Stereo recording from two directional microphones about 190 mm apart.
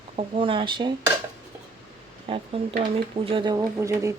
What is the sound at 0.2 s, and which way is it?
Speech, 25° right (ahead or behind).